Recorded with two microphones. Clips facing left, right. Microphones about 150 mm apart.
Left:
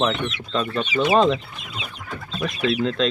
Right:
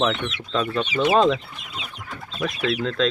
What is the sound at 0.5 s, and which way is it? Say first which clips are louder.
Speech: even; centre (ahead or behind).